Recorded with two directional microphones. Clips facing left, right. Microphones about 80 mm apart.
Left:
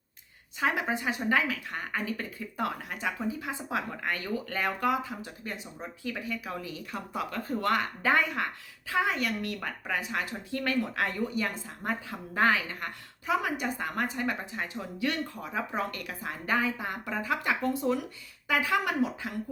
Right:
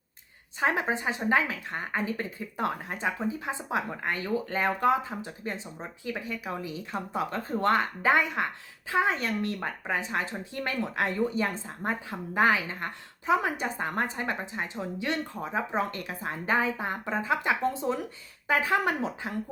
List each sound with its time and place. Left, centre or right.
0.6 s speech: right